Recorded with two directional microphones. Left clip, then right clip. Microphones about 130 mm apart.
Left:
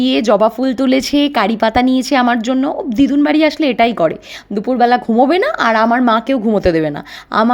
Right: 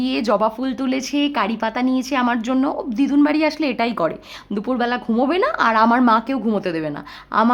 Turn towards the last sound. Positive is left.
turn(degrees=35)  # may be behind; listen again after turning